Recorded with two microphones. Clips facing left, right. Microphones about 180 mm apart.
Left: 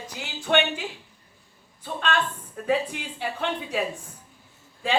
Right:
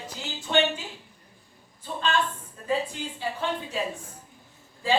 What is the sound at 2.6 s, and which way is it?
Speech, 65° left (ahead or behind).